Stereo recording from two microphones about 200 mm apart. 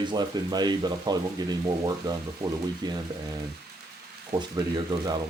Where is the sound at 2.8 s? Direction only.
20° right (ahead or behind).